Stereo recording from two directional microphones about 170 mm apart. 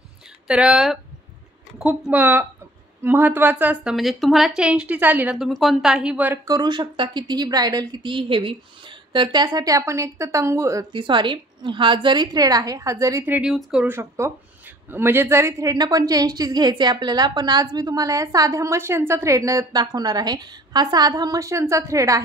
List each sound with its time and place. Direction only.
0.5 s a woman's voice: 5° right (ahead or behind)
3.9 s a woman's voice: centre (ahead or behind); by 10.9 s 20° right (ahead or behind)
10.9 s a woman's voice: 30° right (ahead or behind); by 13.9 s 5° right (ahead or behind)
13.9 s a woman's voice: 15° right (ahead or behind)